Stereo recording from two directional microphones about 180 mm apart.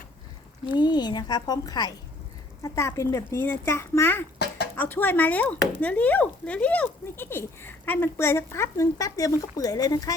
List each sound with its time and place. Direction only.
0.7 s speech: 25° left (ahead or behind)
4.4 s a sound: 65° left (ahead or behind)
4.8 s speech: 10° left (ahead or behind)